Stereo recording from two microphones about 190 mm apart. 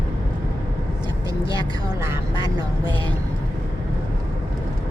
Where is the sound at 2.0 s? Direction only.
20° right (ahead or behind).